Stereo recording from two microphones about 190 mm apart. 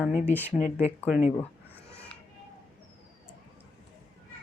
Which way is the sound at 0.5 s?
35° left (ahead or behind).